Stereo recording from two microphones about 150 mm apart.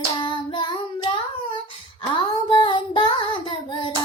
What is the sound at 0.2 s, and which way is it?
Child singing, 30° left (ahead or behind).